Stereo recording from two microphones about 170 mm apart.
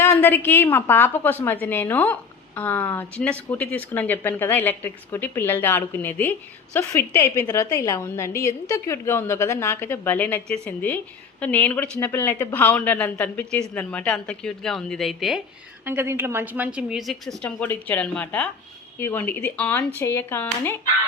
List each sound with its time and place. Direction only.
0.0 s a woman's voice: 10° left (ahead or behind)
15.8 s a woman's voice: 10° right (ahead or behind); by 20.7 s 15° left (ahead or behind)